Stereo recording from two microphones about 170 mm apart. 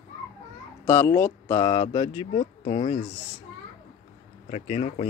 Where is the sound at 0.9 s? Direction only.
15° left (ahead or behind); by 3.0 s 35° left (ahead or behind).